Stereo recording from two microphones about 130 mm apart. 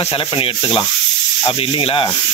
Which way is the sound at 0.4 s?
35° left (ahead or behind).